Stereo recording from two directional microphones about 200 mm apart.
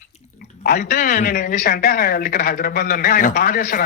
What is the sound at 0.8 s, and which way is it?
Speech, 40° left (ahead or behind).